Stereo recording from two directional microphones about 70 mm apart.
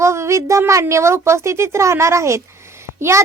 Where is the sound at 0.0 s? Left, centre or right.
Right.